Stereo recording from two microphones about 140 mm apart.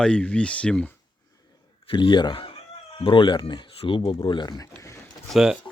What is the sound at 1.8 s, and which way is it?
Speech, 35° left (ahead or behind).